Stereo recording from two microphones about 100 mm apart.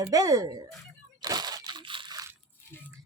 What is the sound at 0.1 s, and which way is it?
Speech, 35° right (ahead or behind).